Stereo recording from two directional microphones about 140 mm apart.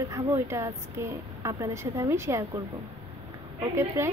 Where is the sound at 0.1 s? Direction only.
20° right (ahead or behind).